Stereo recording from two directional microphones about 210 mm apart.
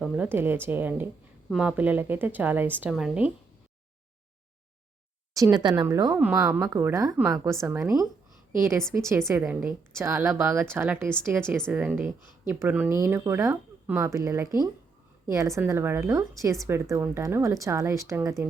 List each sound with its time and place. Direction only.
0.0 s a woman's voice: 10° right (ahead or behind)
5.3 s a woman's voice: 15° right (ahead or behind)